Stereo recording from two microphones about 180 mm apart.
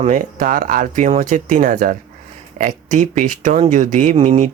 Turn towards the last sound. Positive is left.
turn(degrees=-35)  # may be behind; listen again after turning